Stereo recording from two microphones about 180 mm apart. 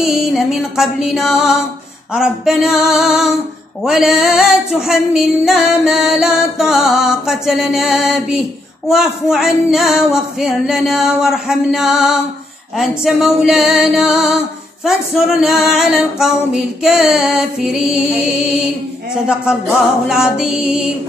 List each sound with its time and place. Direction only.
0.0 s music: centre (ahead or behind)
20.3 s music: 5° right (ahead or behind)